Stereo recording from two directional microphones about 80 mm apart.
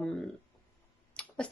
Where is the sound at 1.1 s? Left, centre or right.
Centre.